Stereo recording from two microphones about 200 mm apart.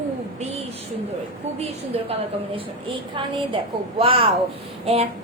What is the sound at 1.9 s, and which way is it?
Speech, 30° right (ahead or behind).